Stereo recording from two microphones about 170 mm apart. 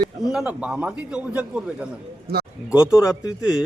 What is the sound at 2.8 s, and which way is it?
Speech, 15° left (ahead or behind).